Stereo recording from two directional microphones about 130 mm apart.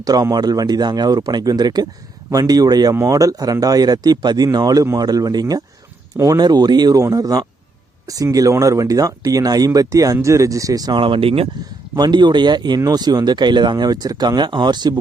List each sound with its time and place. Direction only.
0.0 s speech: 30° right (ahead or behind); by 11.4 s 45° right (ahead or behind)
11.9 s speech: 35° right (ahead or behind)